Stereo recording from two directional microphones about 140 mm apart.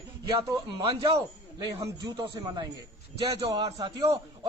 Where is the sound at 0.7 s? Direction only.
30° right (ahead or behind).